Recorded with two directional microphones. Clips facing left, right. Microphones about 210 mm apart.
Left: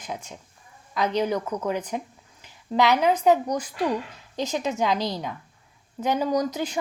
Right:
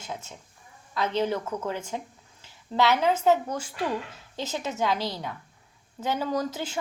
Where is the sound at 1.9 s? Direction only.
15° left (ahead or behind).